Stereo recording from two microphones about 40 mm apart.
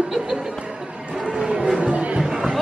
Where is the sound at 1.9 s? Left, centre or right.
Right.